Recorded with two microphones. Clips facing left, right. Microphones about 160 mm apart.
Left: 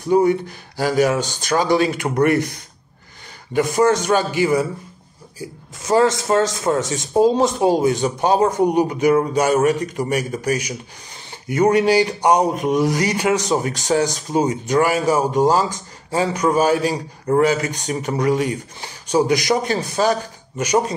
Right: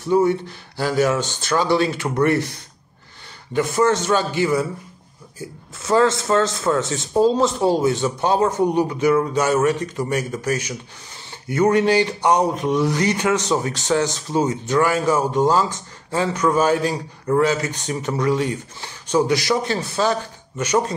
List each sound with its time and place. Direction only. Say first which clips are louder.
0.0 s speech: left 2 dB; 15° left (ahead or behind)
3.5 s speech: left 2 dB; 15° left (ahead or behind)